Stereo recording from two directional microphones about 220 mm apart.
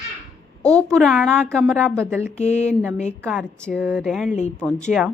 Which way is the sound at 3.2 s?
5° right (ahead or behind).